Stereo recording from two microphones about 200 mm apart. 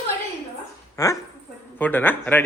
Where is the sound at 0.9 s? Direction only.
15° left (ahead or behind).